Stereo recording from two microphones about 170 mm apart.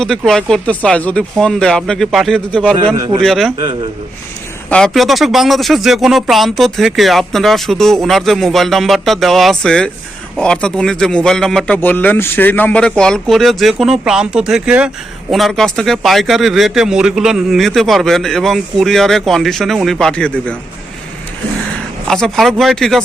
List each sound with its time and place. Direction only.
0.3 s speech: 5° left (ahead or behind)
2.7 s a man's voice: 25° right (ahead or behind)
3.2 s speech: centre (ahead or behind)
4.7 s speech: centre (ahead or behind)
22.0 s speech: 5° left (ahead or behind)